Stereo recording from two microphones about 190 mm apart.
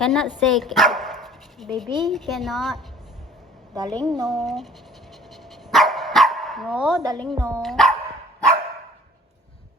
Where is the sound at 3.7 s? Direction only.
20° right (ahead or behind).